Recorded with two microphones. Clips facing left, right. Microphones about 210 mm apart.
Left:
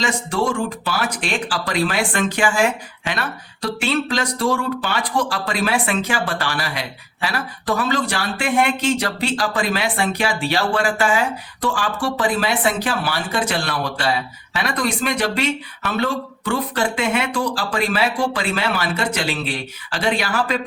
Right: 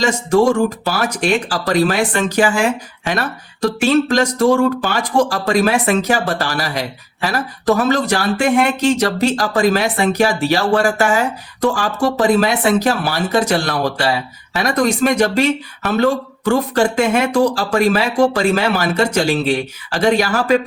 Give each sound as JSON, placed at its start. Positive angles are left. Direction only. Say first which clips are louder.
{"t": 0.0, "sound": "speech", "louder": "right 8 dB", "side_deg": -45}